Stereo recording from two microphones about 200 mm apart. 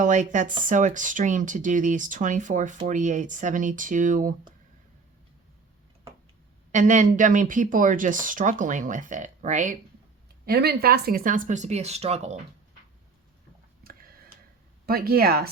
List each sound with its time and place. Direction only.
0.0 s speech: 40° right (ahead or behind)
6.7 s speech: 40° right (ahead or behind)
10.4 s speech: 50° right (ahead or behind); by 12.4 s 35° right (ahead or behind)
14.8 s speech: 50° right (ahead or behind)